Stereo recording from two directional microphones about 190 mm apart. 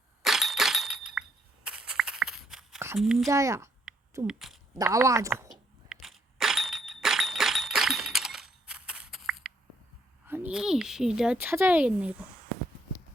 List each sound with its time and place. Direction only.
0.2 s breaking: centre (ahead or behind)
1.6 s a sound: 5° right (ahead or behind)
3.0 s speech: centre (ahead or behind)
3.2 s speech: 15° right (ahead or behind)
4.3 s speech: centre (ahead or behind)
4.7 s speech: 15° right (ahead or behind)
5.5 s a sound: centre (ahead or behind)
10.2 s speech: 10° right (ahead or behind)